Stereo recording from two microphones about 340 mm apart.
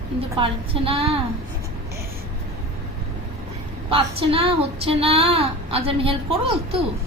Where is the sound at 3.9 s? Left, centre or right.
Centre.